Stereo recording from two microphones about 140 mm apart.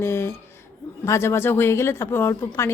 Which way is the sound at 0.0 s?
20° left (ahead or behind).